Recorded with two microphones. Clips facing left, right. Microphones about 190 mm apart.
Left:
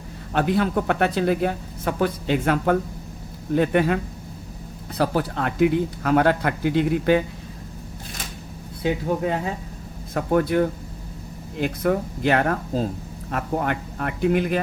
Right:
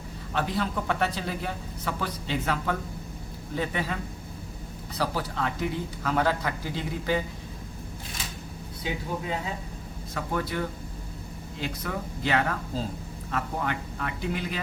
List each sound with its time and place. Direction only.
0.3 s speech: 60° left (ahead or behind)
8.8 s speech: 60° left (ahead or behind)